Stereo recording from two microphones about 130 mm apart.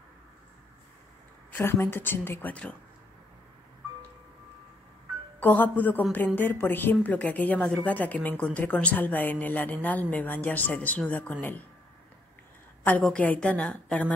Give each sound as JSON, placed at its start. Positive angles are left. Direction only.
{"t": 1.5, "sound": "a woman's voice", "side_deg": 20}
{"t": 5.4, "sound": "a woman's voice", "side_deg": 15}
{"t": 13.0, "sound": "a woman's voice", "side_deg": 10}